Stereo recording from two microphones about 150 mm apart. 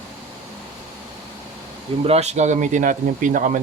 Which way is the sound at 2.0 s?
45° right (ahead or behind).